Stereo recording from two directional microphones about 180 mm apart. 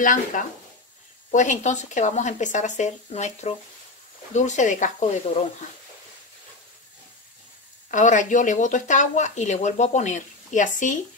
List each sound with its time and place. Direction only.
0.0 s speech: 45° left (ahead or behind)
7.9 s speech: 45° left (ahead or behind)